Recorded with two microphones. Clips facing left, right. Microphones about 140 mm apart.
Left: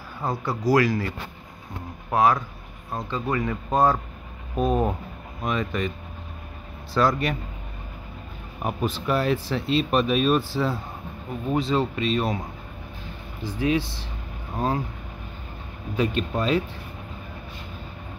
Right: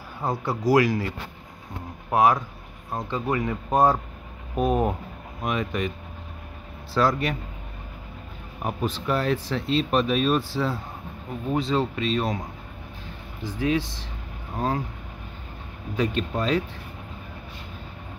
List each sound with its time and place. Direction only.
0.2 s speech: 20° right (ahead or behind); by 7.3 s centre (ahead or behind)
8.6 s speech: 5° left (ahead or behind)
16.0 s speech: 10° left (ahead or behind)